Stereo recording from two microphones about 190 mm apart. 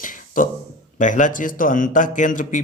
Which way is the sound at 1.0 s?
45° left (ahead or behind).